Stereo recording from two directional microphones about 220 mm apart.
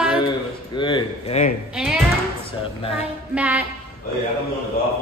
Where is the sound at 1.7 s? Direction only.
5° right (ahead or behind).